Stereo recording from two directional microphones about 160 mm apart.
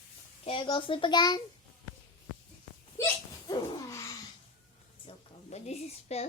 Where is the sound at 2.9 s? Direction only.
20° left (ahead or behind).